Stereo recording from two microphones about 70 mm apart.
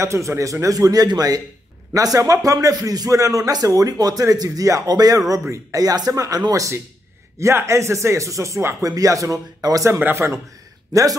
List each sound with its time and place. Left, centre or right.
0.0 s speech: right
2.0 s speech: right
5.5 s speech: right
7.3 s speech: right
8.8 s speech: right
10.1 s a man's voice: right
10.9 s speech: right